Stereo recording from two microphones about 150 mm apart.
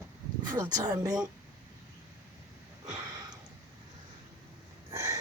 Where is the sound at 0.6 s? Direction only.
25° right (ahead or behind).